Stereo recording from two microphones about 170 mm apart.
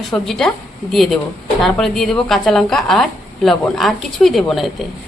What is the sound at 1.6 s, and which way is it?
A woman's voice, centre (ahead or behind).